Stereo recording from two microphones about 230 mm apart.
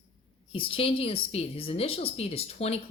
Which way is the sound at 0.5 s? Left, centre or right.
Left.